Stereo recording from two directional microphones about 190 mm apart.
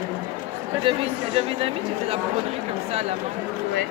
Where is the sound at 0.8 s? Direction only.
30° right (ahead or behind).